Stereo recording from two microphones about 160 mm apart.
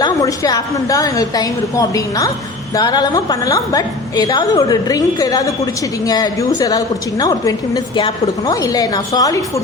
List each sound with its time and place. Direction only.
0.0 s a woman's voice: 25° left (ahead or behind)